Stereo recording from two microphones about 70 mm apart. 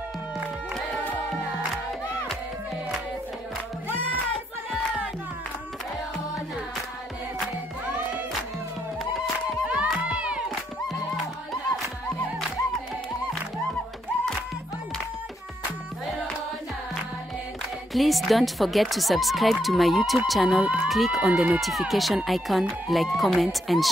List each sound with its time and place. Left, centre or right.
9.7 s crowd: centre
17.9 s speech: centre